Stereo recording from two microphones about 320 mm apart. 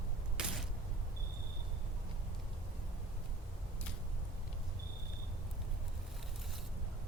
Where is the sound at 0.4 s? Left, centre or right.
Centre.